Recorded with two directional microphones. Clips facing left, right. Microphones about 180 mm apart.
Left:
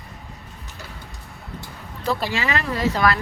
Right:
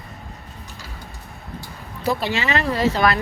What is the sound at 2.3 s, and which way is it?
Speech, 25° right (ahead or behind).